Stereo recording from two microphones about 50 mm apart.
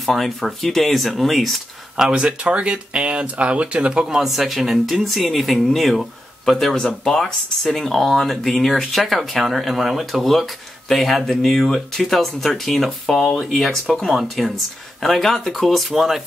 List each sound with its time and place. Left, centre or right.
0.0 s speech: centre
2.1 s speech: right
4.2 s speech: centre